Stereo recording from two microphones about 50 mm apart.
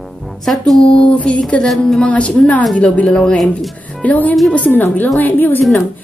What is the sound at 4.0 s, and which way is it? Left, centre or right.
Speech, left.